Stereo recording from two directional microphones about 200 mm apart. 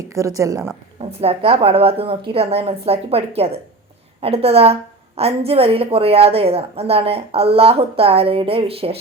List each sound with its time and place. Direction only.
0.0 s a woman's voice: 15° right (ahead or behind)
1.2 s a woman's voice: 30° right (ahead or behind)